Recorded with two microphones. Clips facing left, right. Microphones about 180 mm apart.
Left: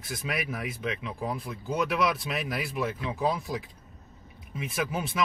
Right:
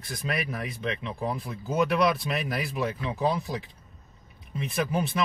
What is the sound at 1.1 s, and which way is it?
Speech, 30° right (ahead or behind).